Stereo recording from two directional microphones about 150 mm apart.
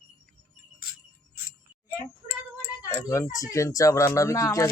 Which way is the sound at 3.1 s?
20° left (ahead or behind).